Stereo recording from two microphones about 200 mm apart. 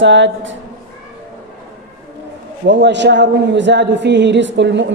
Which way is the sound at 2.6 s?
60° right (ahead or behind).